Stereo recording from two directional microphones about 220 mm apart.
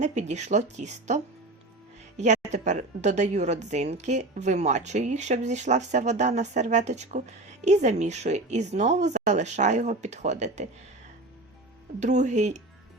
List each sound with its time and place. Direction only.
0.0 s a woman's voice: 30° right (ahead or behind)
11.9 s a woman's voice: 30° right (ahead or behind)